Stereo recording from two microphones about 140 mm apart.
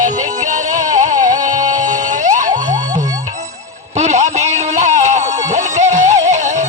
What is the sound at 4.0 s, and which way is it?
Music, 55° right (ahead or behind).